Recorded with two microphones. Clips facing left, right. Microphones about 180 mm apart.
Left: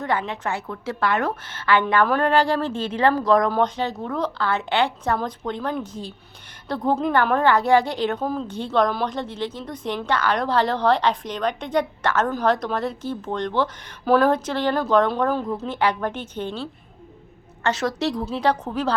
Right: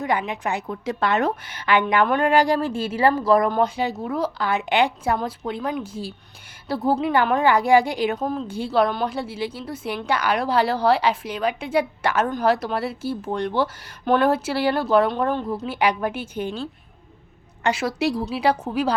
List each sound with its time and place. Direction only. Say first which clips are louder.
0.0 s a woman's voice: right 1 dB; 15° right (ahead or behind)
8.2 s a woman's voice: even; centre (ahead or behind)
8.4 s a woman's voice: right 1 dB; 10° right (ahead or behind)
14.0 s a woman's voice: left 1 dB; centre (ahead or behind)